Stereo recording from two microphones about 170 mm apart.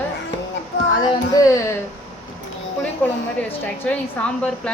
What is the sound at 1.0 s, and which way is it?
Speech, 20° left (ahead or behind).